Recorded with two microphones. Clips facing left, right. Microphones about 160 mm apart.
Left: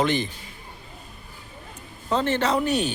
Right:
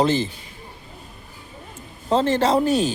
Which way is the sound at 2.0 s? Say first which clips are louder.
Right 4 dB; 35° right (ahead or behind).